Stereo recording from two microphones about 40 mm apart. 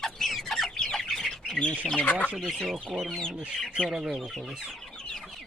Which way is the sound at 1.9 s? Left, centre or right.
Left.